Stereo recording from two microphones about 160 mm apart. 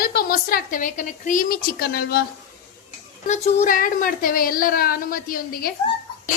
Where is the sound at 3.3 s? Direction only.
50° left (ahead or behind); by 5.7 s 70° left (ahead or behind).